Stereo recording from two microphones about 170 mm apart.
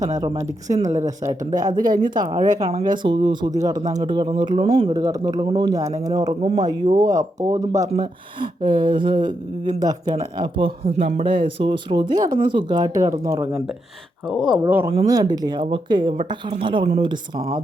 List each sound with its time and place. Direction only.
0.2 s speech: 20° right (ahead or behind)
2.4 s speech: 40° right (ahead or behind)
3.0 s speech: 25° right (ahead or behind)
5.0 s speech: 20° right (ahead or behind)
14.6 s speech: 10° right (ahead or behind)